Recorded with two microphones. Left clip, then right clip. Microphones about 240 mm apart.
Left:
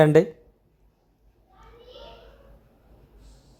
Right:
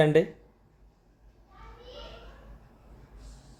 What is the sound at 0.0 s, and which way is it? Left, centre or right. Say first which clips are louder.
Speech: left 5 dB; left.